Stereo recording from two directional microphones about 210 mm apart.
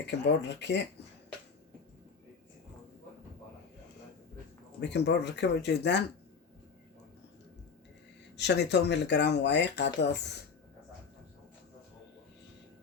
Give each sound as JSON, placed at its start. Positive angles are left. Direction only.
{"t": 0.0, "sound": "speech", "side_deg": 55}
{"t": 4.8, "sound": "speech", "side_deg": 55}
{"t": 8.4, "sound": "speech", "side_deg": 55}